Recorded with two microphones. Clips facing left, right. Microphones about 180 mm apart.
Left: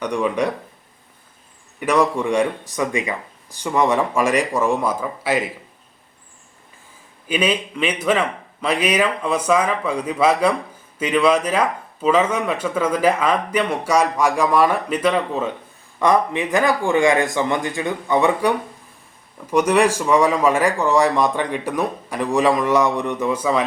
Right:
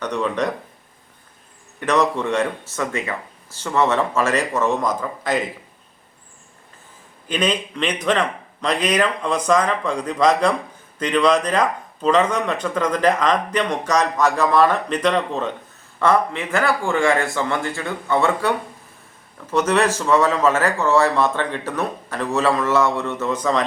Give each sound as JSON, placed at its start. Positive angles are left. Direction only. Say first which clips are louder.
{"t": 0.0, "sound": "speech", "louder": "left 2 dB", "side_deg": 10}
{"t": 1.8, "sound": "speech", "louder": "left 1 dB", "side_deg": 10}
{"t": 7.3, "sound": "speech", "louder": "left 1 dB", "side_deg": 10}